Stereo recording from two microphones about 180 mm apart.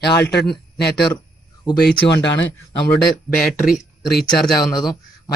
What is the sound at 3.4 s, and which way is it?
Speech, centre (ahead or behind).